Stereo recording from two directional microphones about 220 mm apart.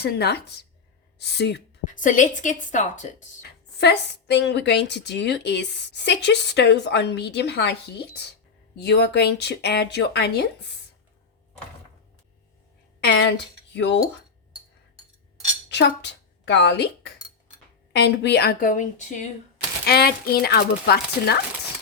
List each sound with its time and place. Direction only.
0.0 s a woman's voice: 45° left (ahead or behind)
1.8 s speech: 35° left (ahead or behind)
3.8 s a woman's voice: 50° left (ahead or behind)
13.1 s a woman's voice: 50° left (ahead or behind)
15.7 s a woman's voice: 50° left (ahead or behind)
17.9 s a woman's voice: 50° left (ahead or behind)